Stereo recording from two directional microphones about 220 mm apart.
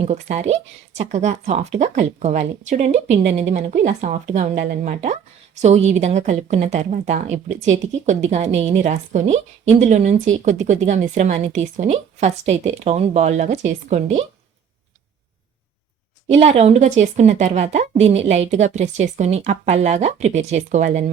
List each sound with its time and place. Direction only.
0.0 s speech: 30° right (ahead or behind)
16.3 s speech: 30° right (ahead or behind)